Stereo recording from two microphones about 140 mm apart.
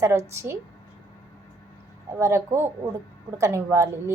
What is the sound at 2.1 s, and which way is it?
A woman's voice, 20° right (ahead or behind).